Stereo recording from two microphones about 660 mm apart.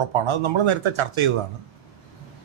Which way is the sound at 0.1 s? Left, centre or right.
Right.